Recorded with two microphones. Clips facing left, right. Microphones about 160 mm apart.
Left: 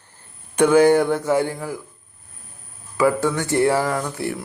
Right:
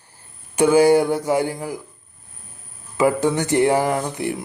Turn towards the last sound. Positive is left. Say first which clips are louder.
# right 2 dB
turn(degrees=-20)  # may be behind; listen again after turning